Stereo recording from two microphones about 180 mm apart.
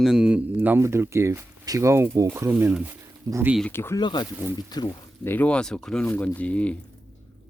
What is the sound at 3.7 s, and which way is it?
Speech, 15° left (ahead or behind).